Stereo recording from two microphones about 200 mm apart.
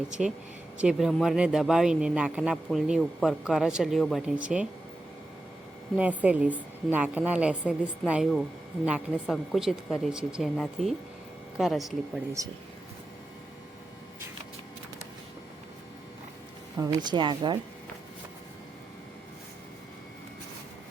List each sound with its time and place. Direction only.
0.2 s a woman's voice: centre (ahead or behind)
6.0 s a woman's voice: 5° right (ahead or behind)
16.7 s a woman's voice: 15° right (ahead or behind)